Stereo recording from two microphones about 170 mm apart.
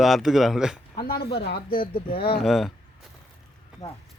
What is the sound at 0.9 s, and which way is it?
Speech, 65° left (ahead or behind).